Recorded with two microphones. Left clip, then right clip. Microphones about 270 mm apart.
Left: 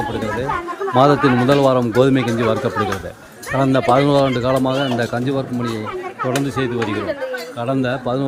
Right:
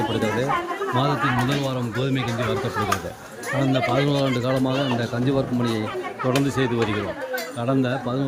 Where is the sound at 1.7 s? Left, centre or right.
Centre.